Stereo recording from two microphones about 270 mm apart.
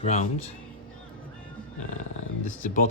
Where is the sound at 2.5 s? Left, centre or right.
Left.